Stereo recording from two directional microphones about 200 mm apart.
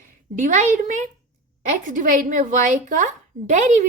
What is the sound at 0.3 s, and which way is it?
A woman's voice, 40° right (ahead or behind).